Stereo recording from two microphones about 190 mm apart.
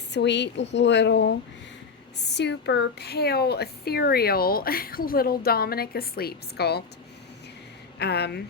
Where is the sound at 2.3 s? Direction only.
65° left (ahead or behind).